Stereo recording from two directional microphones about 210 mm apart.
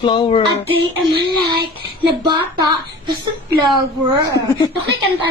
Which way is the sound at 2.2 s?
20° right (ahead or behind).